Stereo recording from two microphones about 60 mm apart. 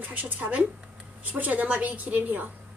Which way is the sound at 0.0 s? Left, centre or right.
Right.